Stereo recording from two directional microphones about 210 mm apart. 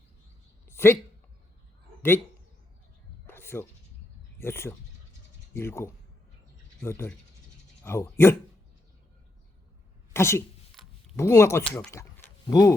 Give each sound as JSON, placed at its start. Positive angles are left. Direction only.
{"t": 0.6, "sound": "a sound", "side_deg": 10}
{"t": 2.0, "sound": "speech", "side_deg": 10}
{"t": 3.2, "sound": "snake", "side_deg": 10}
{"t": 4.4, "sound": "speech", "side_deg": 10}
{"t": 10.1, "sound": "speech", "side_deg": 10}